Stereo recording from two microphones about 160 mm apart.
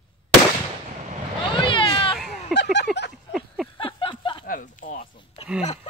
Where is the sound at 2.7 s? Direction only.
90° left.